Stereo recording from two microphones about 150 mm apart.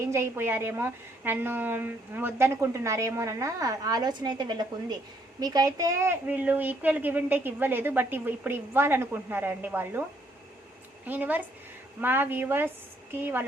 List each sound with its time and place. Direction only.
0.0 s a woman's voice: 20° right (ahead or behind)
11.0 s a woman's voice: 10° right (ahead or behind)